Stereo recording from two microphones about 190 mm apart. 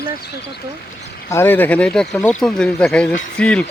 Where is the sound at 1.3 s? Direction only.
10° left (ahead or behind).